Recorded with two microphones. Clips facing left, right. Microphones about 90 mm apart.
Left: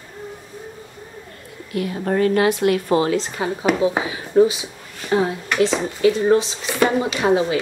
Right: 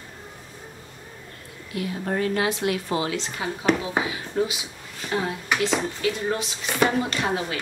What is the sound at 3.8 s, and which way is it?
Speech, 30° left (ahead or behind).